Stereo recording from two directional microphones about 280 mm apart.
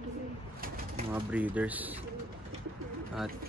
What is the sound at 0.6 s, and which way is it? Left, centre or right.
Bird, right.